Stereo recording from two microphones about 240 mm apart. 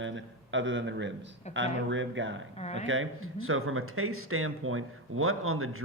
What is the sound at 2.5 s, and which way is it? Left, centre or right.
Speech, left.